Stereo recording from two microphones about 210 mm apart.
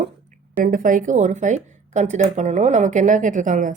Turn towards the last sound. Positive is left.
turn(degrees=-40)  # may be behind; listen again after turning